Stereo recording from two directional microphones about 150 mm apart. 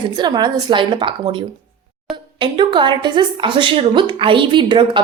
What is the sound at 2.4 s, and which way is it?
A woman's voice, 30° right (ahead or behind).